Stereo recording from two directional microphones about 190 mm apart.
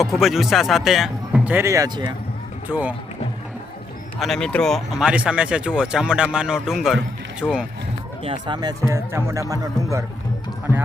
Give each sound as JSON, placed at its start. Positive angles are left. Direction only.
{"t": 0.0, "sound": "speech", "side_deg": 0}
{"t": 2.6, "sound": "speech", "side_deg": -10}
{"t": 4.2, "sound": "speech", "side_deg": 0}
{"t": 8.2, "sound": "speech", "side_deg": -25}
{"t": 10.7, "sound": "speech", "side_deg": 15}